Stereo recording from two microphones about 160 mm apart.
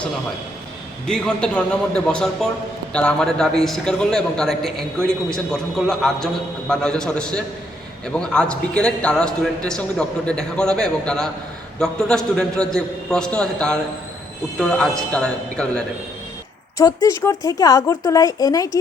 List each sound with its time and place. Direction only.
1.0 s a man's voice: 5° left (ahead or behind)
16.7 s speech: 20° left (ahead or behind)